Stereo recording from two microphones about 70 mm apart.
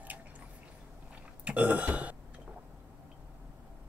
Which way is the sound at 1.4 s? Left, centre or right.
Centre.